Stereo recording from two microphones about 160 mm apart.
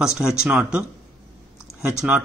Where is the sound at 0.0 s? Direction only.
5° right (ahead or behind).